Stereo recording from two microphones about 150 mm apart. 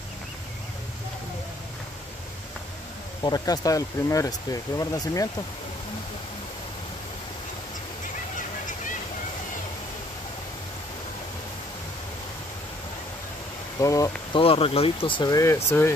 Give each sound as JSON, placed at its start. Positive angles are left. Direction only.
{"t": 3.2, "sound": "speech", "side_deg": 25}
{"t": 13.7, "sound": "speech", "side_deg": 20}
{"t": 14.3, "sound": "speech", "side_deg": 40}